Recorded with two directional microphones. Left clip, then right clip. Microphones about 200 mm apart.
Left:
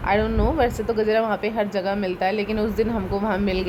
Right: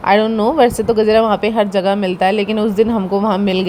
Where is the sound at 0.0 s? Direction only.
35° right (ahead or behind).